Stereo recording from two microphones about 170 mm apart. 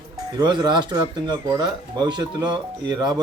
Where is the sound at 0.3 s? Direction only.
25° right (ahead or behind).